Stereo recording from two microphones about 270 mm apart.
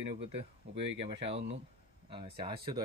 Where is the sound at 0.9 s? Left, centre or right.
Right.